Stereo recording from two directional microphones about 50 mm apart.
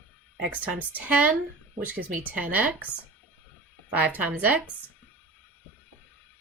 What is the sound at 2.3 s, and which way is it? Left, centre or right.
Speech, right.